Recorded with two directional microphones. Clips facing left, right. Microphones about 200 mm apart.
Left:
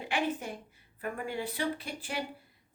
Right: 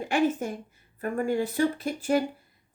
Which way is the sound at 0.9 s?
45° right (ahead or behind).